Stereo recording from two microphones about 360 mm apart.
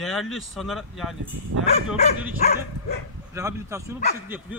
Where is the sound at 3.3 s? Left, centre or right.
Centre.